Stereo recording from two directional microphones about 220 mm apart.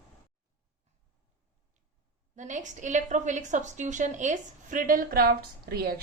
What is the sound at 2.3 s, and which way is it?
A woman's voice, 35° right (ahead or behind).